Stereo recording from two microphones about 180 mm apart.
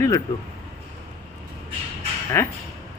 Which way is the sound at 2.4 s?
10° left (ahead or behind).